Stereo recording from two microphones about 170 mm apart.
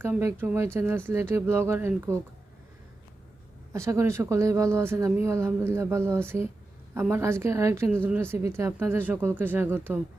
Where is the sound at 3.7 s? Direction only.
15° right (ahead or behind).